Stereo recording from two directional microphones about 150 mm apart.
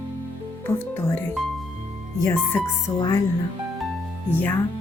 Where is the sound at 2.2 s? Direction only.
15° left (ahead or behind).